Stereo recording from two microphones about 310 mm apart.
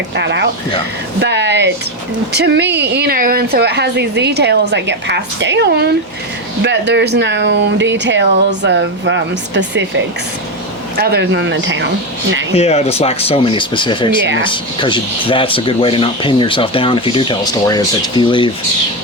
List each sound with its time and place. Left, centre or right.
0.2 s speech: right
12.5 s speech: centre